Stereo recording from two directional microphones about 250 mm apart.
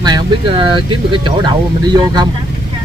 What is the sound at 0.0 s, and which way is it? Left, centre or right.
Speech, centre.